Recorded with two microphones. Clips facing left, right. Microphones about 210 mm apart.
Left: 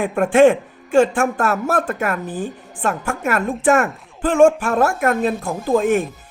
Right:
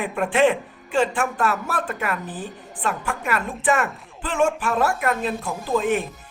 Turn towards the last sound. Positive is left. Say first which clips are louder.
# left 5 dB
turn(degrees=45)  # may be behind; listen again after turning